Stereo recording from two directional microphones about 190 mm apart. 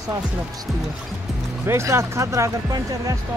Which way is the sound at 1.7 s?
15° right (ahead or behind).